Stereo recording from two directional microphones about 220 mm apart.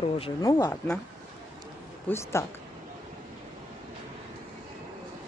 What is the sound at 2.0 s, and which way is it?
Speech, 10° left (ahead or behind).